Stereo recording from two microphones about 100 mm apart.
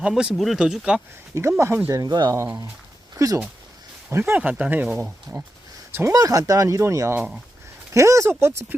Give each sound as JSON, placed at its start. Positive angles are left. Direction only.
{"t": 0.1, "sound": "speech", "side_deg": -5}
{"t": 1.4, "sound": "speech", "side_deg": -30}
{"t": 2.0, "sound": "speech", "side_deg": -40}
{"t": 4.4, "sound": "speech", "side_deg": -15}
{"t": 6.1, "sound": "speech", "side_deg": -35}